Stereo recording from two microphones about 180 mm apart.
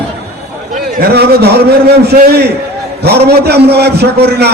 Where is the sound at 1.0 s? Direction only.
65° right (ahead or behind).